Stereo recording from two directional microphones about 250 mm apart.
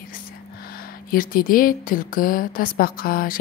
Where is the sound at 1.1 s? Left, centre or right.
Left.